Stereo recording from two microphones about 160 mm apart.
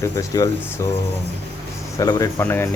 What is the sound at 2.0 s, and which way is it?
Speech, 20° left (ahead or behind).